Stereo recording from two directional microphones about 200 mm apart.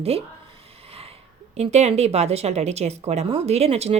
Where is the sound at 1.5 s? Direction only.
35° right (ahead or behind).